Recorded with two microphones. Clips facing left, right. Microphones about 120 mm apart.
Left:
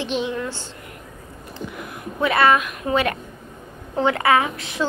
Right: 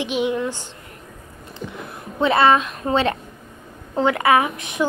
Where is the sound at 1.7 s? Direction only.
25° right (ahead or behind).